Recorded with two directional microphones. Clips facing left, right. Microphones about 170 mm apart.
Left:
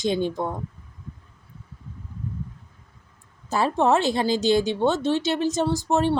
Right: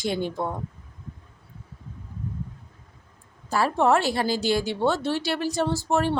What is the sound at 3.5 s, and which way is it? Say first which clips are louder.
Speech: left 1 dB; 20° left (ahead or behind).